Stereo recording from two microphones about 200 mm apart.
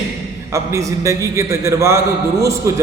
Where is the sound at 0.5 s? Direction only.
15° right (ahead or behind).